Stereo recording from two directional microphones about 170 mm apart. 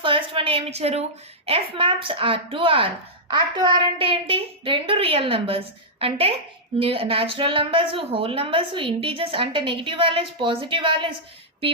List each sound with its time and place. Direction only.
0.0 s speech: 30° right (ahead or behind)